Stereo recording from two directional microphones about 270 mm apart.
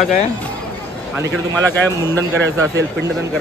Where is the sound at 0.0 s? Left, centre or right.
Left.